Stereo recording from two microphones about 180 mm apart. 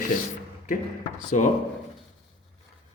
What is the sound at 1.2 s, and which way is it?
Speech, 45° left (ahead or behind).